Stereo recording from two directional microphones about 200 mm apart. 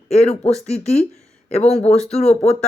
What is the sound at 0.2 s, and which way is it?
Speech, 30° left (ahead or behind).